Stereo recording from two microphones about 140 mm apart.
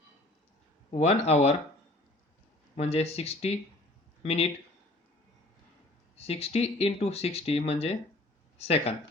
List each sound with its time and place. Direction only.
0.9 s speech: 50° left (ahead or behind)
2.7 s speech: 45° left (ahead or behind)
6.1 s speech: 45° left (ahead or behind)